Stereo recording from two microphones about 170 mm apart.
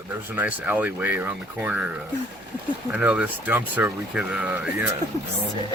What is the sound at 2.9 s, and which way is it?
Speech, 5° right (ahead or behind).